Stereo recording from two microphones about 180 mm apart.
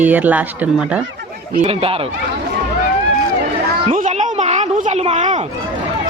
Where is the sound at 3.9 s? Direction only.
40° right (ahead or behind).